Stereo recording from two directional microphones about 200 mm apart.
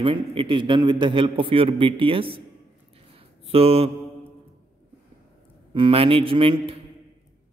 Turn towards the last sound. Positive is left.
turn(degrees=-25)  # may be behind; listen again after turning